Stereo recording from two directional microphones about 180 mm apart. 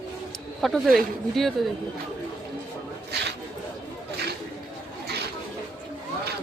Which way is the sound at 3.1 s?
65° right (ahead or behind).